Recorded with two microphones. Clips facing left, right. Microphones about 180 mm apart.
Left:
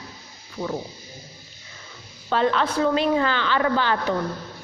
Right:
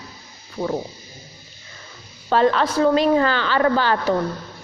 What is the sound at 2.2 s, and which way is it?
A woman's voice, 40° right (ahead or behind).